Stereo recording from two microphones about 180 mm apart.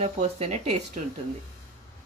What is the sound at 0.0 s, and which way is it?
Speech, 40° right (ahead or behind).